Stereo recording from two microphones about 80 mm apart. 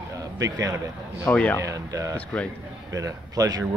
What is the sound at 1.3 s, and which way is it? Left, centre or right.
Speech, centre.